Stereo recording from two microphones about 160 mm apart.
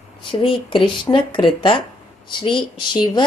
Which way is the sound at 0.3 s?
30° left (ahead or behind).